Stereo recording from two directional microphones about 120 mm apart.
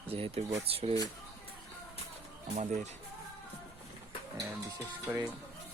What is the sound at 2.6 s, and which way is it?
Speech, 70° right (ahead or behind).